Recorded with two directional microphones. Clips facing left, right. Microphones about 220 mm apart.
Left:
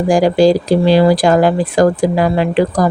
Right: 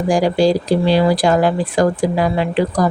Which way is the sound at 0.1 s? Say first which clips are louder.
Left 4 dB; 90° left.